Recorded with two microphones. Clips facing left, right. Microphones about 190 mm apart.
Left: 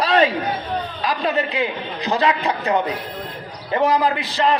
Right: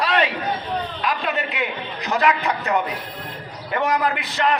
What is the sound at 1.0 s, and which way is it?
A man's voice, 35° left (ahead or behind).